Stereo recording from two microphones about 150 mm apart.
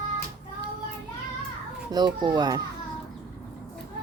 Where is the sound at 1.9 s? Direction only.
30° right (ahead or behind).